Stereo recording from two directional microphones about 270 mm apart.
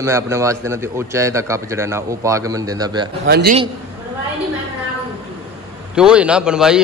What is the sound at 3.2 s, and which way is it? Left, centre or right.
Speech, right.